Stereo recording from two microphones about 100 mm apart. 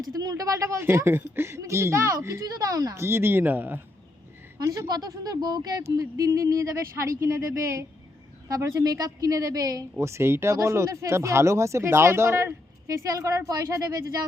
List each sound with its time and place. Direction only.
0.0 s speech: 40° right (ahead or behind); by 3.8 s 20° right (ahead or behind)
4.5 s speech: 30° right (ahead or behind)
10.0 s speech: 25° right (ahead or behind)